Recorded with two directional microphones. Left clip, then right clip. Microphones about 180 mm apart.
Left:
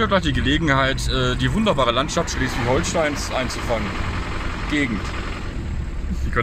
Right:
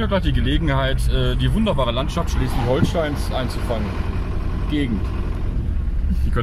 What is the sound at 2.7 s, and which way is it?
Speech, 10° left (ahead or behind).